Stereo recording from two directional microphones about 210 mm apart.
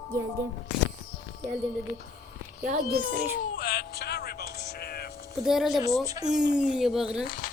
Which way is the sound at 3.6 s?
45° left (ahead or behind).